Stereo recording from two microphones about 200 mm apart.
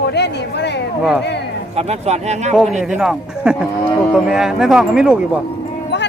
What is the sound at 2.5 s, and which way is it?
Speech, centre (ahead or behind).